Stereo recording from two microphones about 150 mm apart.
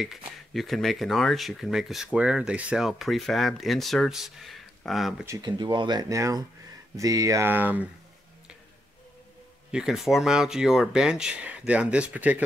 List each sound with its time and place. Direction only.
0.0 s speech: centre (ahead or behind)
5.4 s speech: 30° right (ahead or behind); by 7.9 s 10° right (ahead or behind)
9.7 s speech: 5° right (ahead or behind)